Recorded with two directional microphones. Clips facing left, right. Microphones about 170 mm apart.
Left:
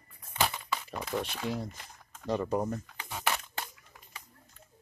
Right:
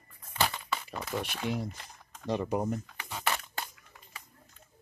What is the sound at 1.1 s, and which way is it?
Speech, 15° right (ahead or behind).